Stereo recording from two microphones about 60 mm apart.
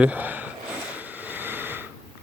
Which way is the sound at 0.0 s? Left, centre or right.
Right.